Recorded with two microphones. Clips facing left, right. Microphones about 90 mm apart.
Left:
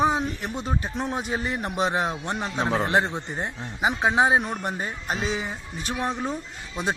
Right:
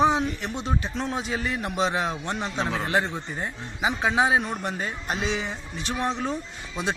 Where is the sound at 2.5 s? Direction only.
35° left (ahead or behind).